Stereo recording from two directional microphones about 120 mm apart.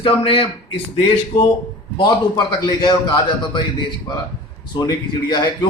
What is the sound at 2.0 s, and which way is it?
A man's voice, 35° left (ahead or behind).